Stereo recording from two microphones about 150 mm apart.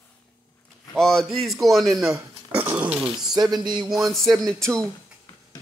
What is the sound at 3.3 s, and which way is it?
Speech, 25° right (ahead or behind).